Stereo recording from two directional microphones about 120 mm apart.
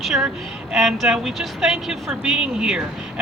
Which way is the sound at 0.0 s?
Centre (ahead or behind).